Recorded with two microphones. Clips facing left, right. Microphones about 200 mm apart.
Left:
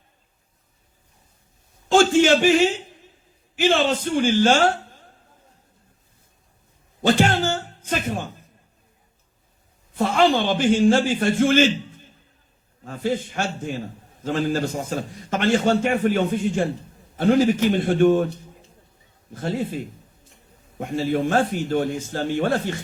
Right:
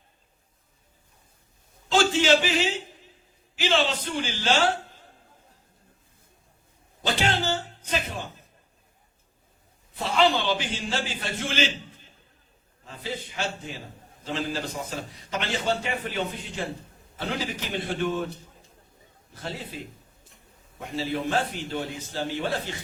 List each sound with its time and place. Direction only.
1.9 s a man's voice: 50° left (ahead or behind)
7.0 s a sound: 50° left (ahead or behind)
9.9 s a man's voice: 50° left (ahead or behind)
19.3 s a man's voice: 50° left (ahead or behind)